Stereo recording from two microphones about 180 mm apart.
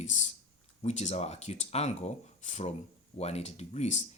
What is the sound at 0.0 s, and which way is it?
Speech, 40° left (ahead or behind).